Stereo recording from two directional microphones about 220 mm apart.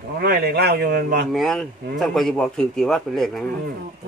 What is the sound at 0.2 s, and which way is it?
A man's voice, 45° right (ahead or behind).